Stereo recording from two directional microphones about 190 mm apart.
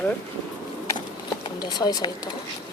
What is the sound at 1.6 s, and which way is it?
Speech, 20° left (ahead or behind).